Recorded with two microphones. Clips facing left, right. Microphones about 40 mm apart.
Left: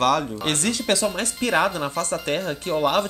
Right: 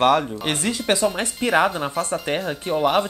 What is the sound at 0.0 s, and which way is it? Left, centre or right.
Speech, right.